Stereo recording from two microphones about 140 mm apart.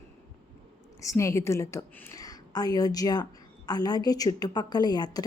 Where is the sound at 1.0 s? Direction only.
20° left (ahead or behind).